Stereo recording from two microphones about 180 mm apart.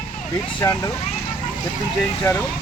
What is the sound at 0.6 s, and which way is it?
Speech, 15° left (ahead or behind).